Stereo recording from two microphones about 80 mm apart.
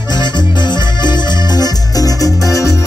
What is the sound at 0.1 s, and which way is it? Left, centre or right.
Accordion, left.